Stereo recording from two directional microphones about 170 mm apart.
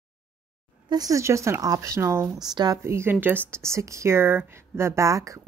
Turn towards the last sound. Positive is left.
turn(degrees=-20)  # may be behind; listen again after turning